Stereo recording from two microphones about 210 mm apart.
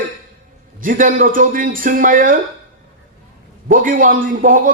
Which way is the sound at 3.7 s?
40° right (ahead or behind).